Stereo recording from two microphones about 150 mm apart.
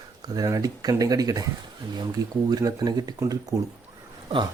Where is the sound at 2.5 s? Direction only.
25° right (ahead or behind).